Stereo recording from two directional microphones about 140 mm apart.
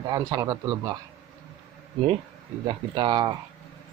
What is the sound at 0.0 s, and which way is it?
Speech, 30° right (ahead or behind).